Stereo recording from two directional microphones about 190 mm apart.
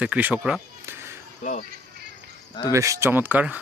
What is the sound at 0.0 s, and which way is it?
Speech, 5° right (ahead or behind).